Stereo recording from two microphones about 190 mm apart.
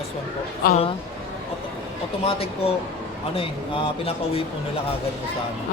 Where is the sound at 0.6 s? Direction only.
50° left (ahead or behind).